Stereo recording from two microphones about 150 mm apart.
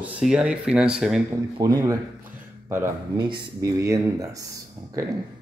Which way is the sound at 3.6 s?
20° right (ahead or behind).